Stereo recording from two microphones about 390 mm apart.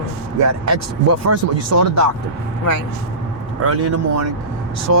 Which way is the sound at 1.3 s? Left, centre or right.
Right.